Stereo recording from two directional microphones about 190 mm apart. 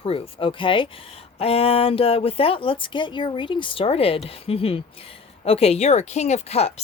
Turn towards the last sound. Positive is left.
turn(degrees=35)  # may be behind; listen again after turning